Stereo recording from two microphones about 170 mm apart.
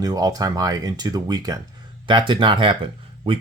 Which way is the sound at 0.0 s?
20° right (ahead or behind).